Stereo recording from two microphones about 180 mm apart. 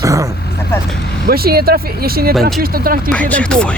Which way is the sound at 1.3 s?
60° right (ahead or behind).